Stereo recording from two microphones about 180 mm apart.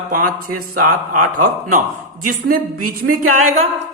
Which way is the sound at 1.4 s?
45° right (ahead or behind).